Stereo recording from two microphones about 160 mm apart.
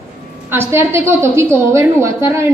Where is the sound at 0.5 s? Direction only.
15° right (ahead or behind).